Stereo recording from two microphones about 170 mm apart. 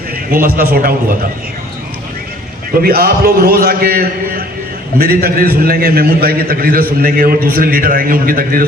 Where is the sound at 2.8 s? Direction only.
65° right (ahead or behind).